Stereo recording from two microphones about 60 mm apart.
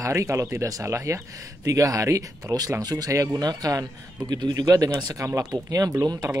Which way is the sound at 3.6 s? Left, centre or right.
Right.